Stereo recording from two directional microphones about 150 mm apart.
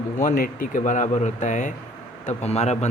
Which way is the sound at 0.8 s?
55° left (ahead or behind).